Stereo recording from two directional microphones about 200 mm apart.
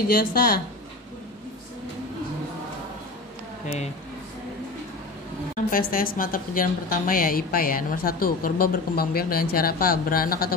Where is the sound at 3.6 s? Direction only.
35° left (ahead or behind).